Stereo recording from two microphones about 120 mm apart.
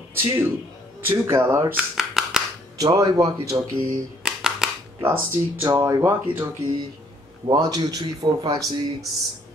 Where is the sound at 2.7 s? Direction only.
30° right (ahead or behind).